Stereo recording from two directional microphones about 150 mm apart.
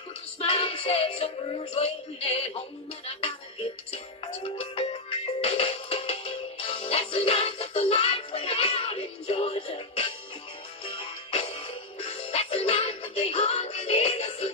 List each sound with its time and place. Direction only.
0.4 s music: 40° left (ahead or behind)
3.9 s music: 40° left (ahead or behind)